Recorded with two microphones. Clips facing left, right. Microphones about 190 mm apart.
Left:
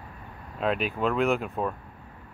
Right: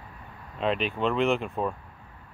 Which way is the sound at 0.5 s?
5° left (ahead or behind).